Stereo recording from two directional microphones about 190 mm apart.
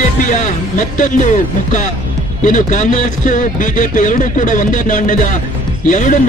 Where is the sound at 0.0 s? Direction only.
40° left (ahead or behind).